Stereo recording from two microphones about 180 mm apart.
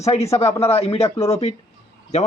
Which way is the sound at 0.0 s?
35° left (ahead or behind).